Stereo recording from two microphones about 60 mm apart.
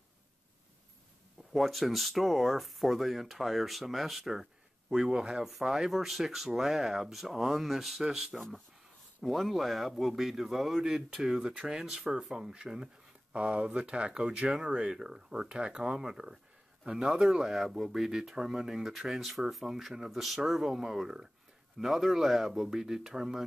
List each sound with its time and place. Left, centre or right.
1.5 s speech: centre
8.4 s a man's voice: centre